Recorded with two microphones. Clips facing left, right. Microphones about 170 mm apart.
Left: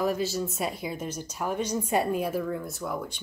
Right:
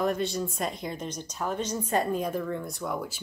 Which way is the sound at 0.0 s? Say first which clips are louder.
Even; 5° left (ahead or behind).